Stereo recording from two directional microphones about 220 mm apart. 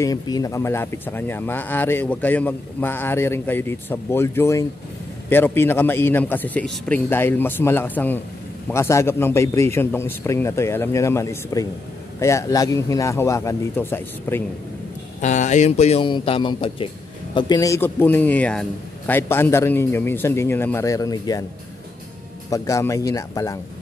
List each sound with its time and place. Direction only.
0.0 s speech: 15° left (ahead or behind)
15.1 s speech: 35° left (ahead or behind); by 21.5 s 15° left (ahead or behind)
22.5 s speech: 15° left (ahead or behind)